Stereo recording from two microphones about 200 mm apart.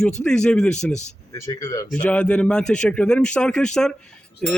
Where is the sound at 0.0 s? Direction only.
5° left (ahead or behind).